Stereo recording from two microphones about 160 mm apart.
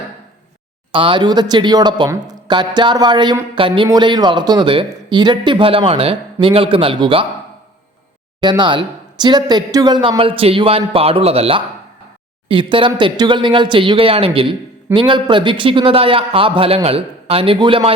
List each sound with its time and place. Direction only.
0.9 s speech: 30° right (ahead or behind)
8.4 s speech: 30° right (ahead or behind)